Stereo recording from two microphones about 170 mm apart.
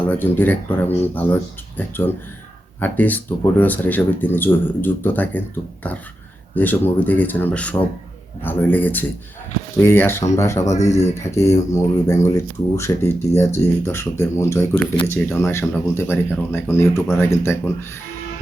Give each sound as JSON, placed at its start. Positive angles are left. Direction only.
{"t": 0.2, "sound": "speech", "side_deg": 10}
{"t": 2.8, "sound": "speech", "side_deg": 10}
{"t": 6.6, "sound": "speech", "side_deg": 10}